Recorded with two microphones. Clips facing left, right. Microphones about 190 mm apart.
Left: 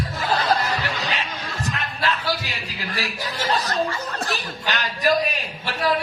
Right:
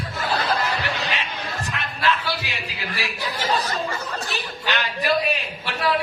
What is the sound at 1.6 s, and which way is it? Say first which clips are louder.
Music: even; 40° left (ahead or behind).